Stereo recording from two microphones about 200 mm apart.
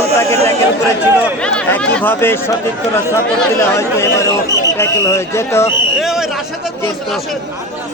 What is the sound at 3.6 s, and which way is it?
Speech, 15° left (ahead or behind).